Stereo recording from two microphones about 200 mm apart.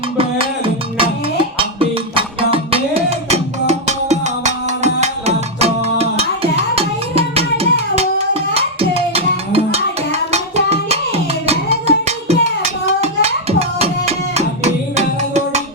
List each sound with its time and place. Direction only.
0.2 s music: 25° right (ahead or behind)